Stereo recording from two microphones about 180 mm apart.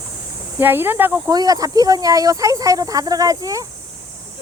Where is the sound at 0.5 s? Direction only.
10° right (ahead or behind).